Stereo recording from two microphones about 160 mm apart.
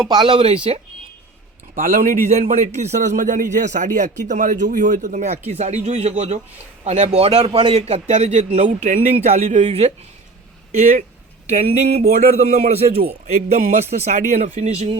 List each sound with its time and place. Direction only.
0.1 s speech: 30° right (ahead or behind)
1.7 s speech: 60° right (ahead or behind)
2.4 s a man's voice: 50° right (ahead or behind)